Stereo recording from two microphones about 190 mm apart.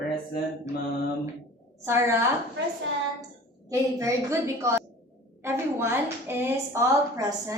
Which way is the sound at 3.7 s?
15° right (ahead or behind).